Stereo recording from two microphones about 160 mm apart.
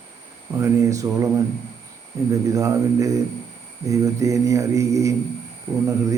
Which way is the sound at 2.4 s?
20° right (ahead or behind).